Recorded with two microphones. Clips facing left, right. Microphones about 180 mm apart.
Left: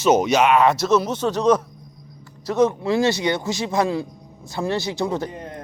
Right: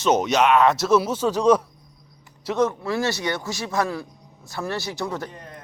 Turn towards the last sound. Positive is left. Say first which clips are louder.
# left 5 dB
turn(degrees=20)  # may be behind; listen again after turning